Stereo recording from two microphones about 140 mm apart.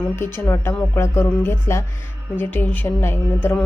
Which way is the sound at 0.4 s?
20° left (ahead or behind).